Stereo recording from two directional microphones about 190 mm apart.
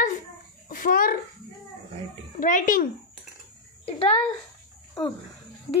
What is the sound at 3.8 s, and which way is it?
Speech, 30° left (ahead or behind).